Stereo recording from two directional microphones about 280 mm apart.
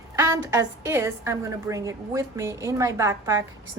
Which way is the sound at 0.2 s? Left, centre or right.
Centre.